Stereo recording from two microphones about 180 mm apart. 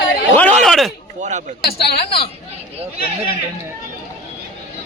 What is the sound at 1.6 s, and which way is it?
Speech, 60° left (ahead or behind).